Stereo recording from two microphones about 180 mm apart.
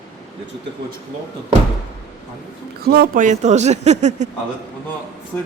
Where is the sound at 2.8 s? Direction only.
55° right (ahead or behind); by 4.3 s 40° right (ahead or behind).